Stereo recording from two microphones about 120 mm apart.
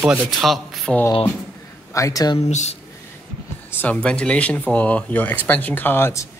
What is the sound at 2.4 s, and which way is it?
Speech, 70° left (ahead or behind).